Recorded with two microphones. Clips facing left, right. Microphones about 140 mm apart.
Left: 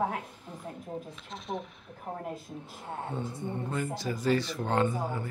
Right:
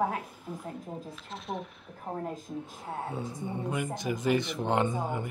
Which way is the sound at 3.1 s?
15° right (ahead or behind).